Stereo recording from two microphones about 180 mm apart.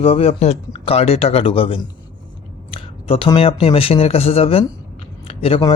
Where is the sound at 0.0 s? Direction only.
30° left (ahead or behind).